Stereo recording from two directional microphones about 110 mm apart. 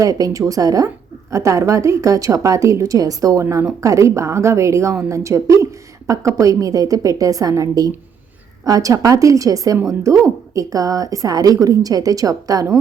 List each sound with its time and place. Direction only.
0.0 s a woman's voice: 30° right (ahead or behind)
3.4 s a woman's voice: 20° right (ahead or behind)